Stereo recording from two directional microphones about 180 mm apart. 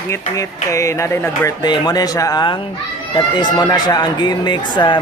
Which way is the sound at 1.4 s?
25° left (ahead or behind).